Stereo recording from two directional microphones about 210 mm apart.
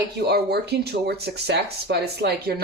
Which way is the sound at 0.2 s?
50° right (ahead or behind).